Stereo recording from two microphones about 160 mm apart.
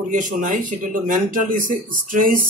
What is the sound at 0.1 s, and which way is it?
Speech, 55° right (ahead or behind).